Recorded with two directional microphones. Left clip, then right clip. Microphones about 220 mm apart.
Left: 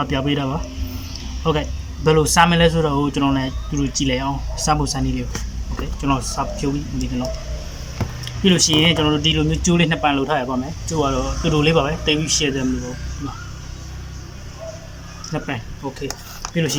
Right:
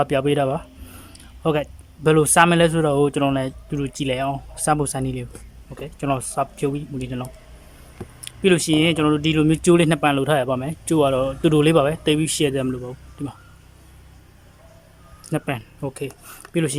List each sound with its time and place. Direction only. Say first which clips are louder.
0.0 s speech: right 3 dB; 45° right (ahead or behind)
15.3 s speech: right 1 dB; 50° right (ahead or behind)